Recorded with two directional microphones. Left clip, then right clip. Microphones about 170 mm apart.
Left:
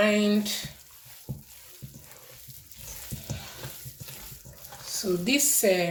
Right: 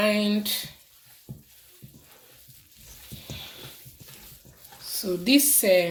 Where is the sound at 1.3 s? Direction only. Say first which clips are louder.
Left 4 dB; 20° left (ahead or behind).